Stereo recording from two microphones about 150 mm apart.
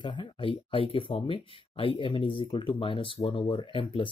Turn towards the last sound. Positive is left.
turn(degrees=35)  # may be behind; listen again after turning